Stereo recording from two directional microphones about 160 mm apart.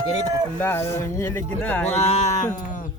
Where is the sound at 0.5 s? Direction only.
10° left (ahead or behind).